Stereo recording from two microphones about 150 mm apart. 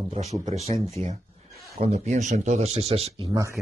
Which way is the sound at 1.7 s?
45° right (ahead or behind).